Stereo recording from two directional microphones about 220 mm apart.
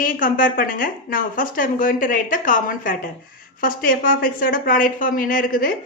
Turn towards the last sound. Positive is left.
turn(degrees=40)  # may be behind; listen again after turning